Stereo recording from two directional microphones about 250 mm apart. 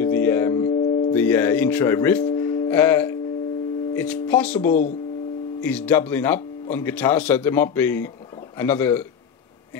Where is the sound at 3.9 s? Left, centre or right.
Centre.